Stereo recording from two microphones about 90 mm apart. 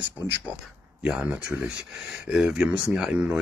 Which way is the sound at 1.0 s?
10° right (ahead or behind).